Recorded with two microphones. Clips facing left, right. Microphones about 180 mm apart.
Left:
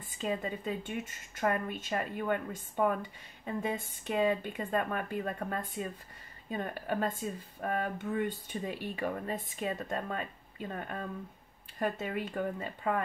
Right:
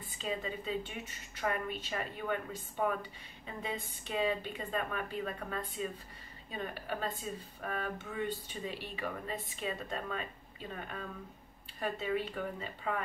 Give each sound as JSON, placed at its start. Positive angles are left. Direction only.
{"t": 0.2, "sound": "a woman's voice", "side_deg": 50}
{"t": 11.8, "sound": "a woman's voice", "side_deg": 50}